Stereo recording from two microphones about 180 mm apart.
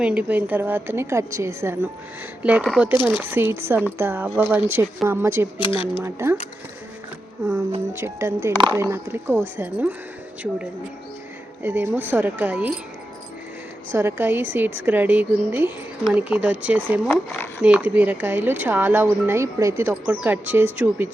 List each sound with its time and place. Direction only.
0.0 s speech: 10° right (ahead or behind)
5.5 s speech: 30° left (ahead or behind)
6.0 s speech: 15° right (ahead or behind)
7.4 s speech: 15° right (ahead or behind)
11.6 s speech: 10° right (ahead or behind)
13.9 s speech: 10° right (ahead or behind)
17.1 s speech: 10° left (ahead or behind)
17.6 s speech: 5° right (ahead or behind)